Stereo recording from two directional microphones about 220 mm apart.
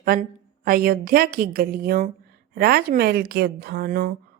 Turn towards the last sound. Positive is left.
turn(degrees=-40)  # may be behind; listen again after turning